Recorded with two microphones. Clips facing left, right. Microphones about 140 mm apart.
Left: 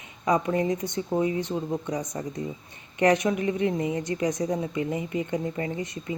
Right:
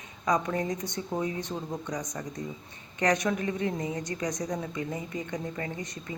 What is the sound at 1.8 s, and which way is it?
Speech, 25° left (ahead or behind).